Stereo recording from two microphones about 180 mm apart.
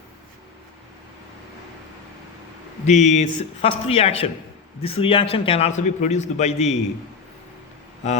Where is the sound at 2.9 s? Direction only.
40° left (ahead or behind).